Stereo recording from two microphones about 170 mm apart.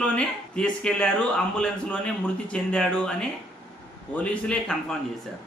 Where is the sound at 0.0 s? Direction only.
5° left (ahead or behind).